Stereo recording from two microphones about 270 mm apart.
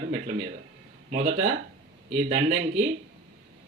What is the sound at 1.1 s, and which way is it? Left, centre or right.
Speech, right.